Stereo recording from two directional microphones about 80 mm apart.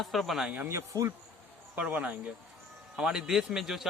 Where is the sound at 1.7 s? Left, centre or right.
Centre.